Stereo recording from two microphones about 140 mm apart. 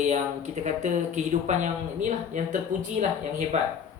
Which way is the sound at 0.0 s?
55° right (ahead or behind).